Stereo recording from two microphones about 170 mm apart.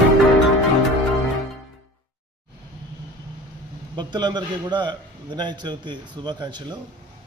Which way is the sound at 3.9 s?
25° right (ahead or behind).